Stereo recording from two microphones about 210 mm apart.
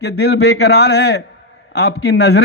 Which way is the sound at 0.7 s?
50° left (ahead or behind).